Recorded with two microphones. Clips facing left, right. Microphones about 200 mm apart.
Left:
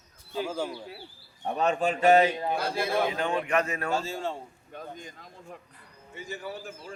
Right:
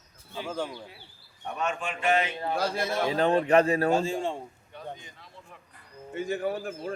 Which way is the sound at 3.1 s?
35° right (ahead or behind).